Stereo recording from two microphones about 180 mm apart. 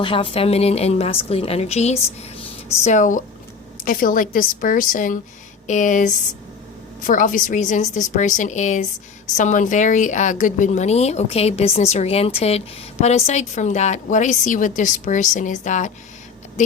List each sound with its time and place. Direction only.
0.0 s a woman's voice: 30° left (ahead or behind)